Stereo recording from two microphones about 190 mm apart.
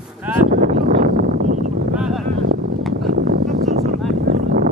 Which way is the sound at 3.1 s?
55° right (ahead or behind).